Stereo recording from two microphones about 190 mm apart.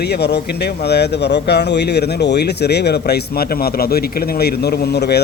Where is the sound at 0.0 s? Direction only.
60° left (ahead or behind).